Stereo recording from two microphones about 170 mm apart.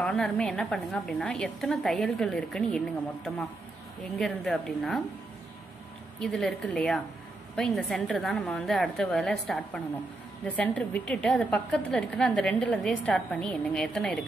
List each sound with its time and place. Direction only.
0.0 s a woman's voice: 5° left (ahead or behind)
4.2 s a woman's voice: centre (ahead or behind)
6.1 s a woman's voice: 5° left (ahead or behind)